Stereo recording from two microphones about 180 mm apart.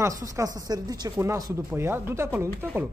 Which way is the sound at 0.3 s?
20° right (ahead or behind).